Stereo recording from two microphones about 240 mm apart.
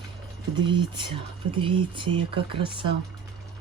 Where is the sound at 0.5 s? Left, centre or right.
Centre.